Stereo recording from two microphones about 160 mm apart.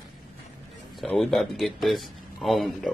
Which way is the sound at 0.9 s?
Centre (ahead or behind).